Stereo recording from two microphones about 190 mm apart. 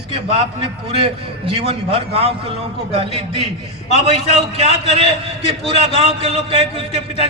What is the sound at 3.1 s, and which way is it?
A man's voice, 35° left (ahead or behind).